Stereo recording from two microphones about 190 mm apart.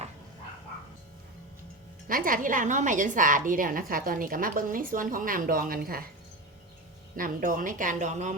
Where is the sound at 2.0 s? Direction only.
45° right (ahead or behind).